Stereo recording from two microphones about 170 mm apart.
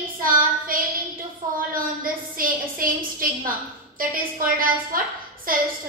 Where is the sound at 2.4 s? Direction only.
55° right (ahead or behind).